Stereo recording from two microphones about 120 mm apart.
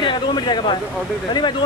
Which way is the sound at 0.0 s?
40° left (ahead or behind).